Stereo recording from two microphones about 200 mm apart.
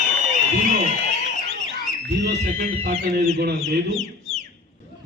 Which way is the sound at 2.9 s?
50° right (ahead or behind).